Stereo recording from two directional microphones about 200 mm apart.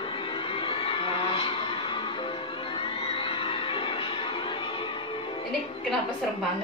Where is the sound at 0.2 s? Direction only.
25° left (ahead or behind).